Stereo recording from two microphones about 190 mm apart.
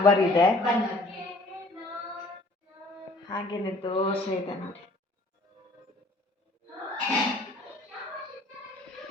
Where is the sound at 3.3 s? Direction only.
25° left (ahead or behind).